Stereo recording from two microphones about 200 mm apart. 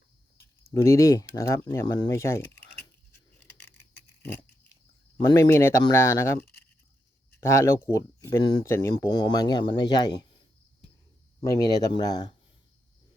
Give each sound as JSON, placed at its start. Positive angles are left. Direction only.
{"t": 0.7, "sound": "speech", "side_deg": 15}
{"t": 4.2, "sound": "dog", "side_deg": 10}
{"t": 5.2, "sound": "speech", "side_deg": 15}
{"t": 11.4, "sound": "speech", "side_deg": 20}